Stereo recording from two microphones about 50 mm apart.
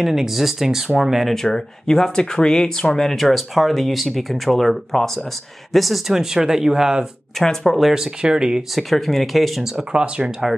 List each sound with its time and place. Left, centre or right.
0.0 s speech: centre
1.3 s speech: centre
7.3 s speech: centre
7.9 s speech: centre
8.7 s speech: centre
9.8 s speech: right